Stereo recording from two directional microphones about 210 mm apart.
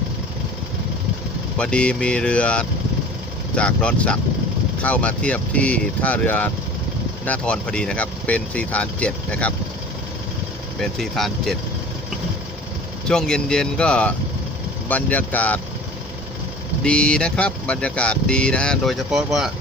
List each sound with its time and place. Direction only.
1.5 s speech: 5° left (ahead or behind)
10.8 s speech: centre (ahead or behind)
13.1 s speech: 5° left (ahead or behind)
16.8 s speech: 5° left (ahead or behind)